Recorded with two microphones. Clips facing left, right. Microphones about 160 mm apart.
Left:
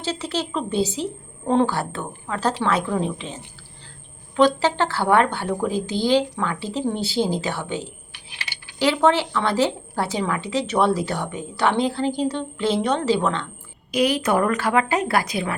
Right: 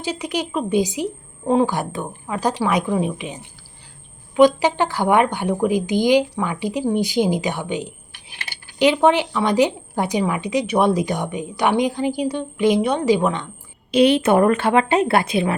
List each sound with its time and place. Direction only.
0.0 s a woman's voice: 15° right (ahead or behind)
8.1 s coin: 50° right (ahead or behind)
8.8 s a woman's voice: 15° right (ahead or behind)
13.9 s a woman's voice: 25° right (ahead or behind)